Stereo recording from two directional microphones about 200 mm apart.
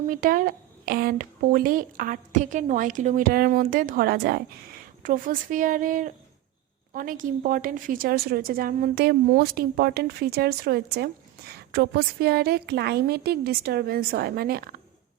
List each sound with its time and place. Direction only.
0.1 s a woman's voice: 45° right (ahead or behind)